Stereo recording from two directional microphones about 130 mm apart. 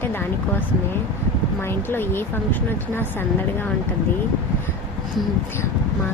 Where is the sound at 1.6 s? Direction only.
15° left (ahead or behind).